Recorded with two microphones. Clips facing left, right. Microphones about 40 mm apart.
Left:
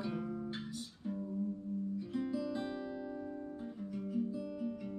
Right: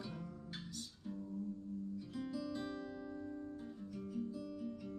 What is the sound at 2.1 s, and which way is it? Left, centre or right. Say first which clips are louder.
Music: left 6 dB; left.